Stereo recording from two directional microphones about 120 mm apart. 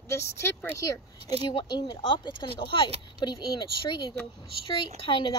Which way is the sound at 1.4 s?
40° left (ahead or behind).